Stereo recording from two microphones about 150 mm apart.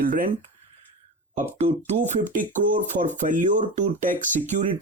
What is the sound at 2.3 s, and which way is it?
Speech, 60° right (ahead or behind).